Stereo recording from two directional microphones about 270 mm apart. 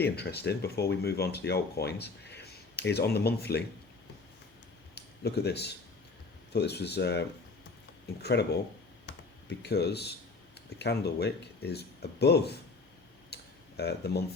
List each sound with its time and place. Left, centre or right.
0.0 s speech: left
4.9 s speech: left
9.0 s computer keyboard: left
10.8 s speech: left
13.3 s tick: left